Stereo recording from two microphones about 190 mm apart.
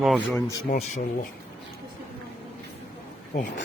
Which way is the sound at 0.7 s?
45° left (ahead or behind).